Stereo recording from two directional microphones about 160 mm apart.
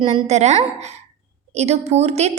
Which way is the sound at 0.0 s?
45° right (ahead or behind).